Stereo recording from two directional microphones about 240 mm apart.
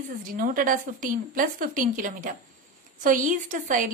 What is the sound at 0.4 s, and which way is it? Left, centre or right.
A woman's voice, right.